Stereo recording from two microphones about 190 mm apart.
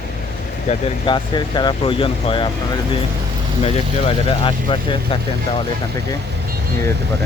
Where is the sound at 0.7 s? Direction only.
25° left (ahead or behind).